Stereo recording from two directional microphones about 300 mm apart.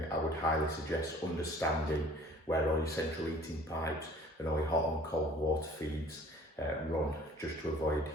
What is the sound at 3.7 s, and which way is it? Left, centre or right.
Speech, centre.